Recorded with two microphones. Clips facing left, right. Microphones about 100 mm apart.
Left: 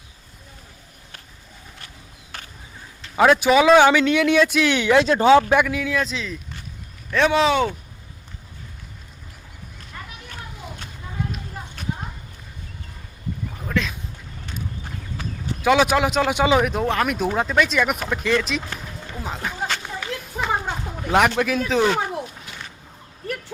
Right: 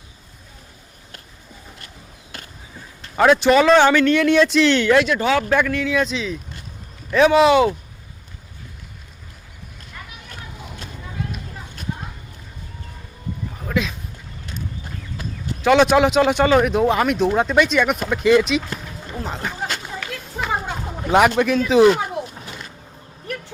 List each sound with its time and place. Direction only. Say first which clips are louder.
3.2 s speech: right 1 dB; 5° left (ahead or behind)
5.0 s speech: left 3 dB; 35° left (ahead or behind)
5.3 s speech: left 6 dB; 20° left (ahead or behind); by 7.7 s 5° right (ahead or behind)
13.7 s a sound: right 2 dB; 5° right (ahead or behind)
15.6 s speech: right 4 dB; 5° left (ahead or behind)
21.1 s speech: right 3 dB; centre (ahead or behind)